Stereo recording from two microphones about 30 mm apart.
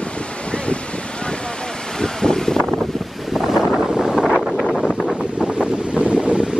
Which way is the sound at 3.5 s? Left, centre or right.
Centre.